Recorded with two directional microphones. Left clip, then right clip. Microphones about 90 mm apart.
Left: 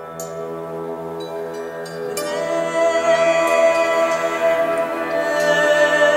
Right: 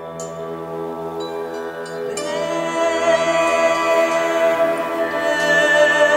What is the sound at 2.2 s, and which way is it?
Music, 15° right (ahead or behind).